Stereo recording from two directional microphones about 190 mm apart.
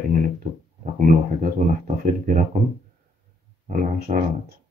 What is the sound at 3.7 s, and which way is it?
Speech, 45° right (ahead or behind).